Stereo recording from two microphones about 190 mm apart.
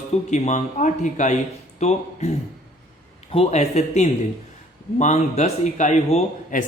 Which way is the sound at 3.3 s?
35° left (ahead or behind).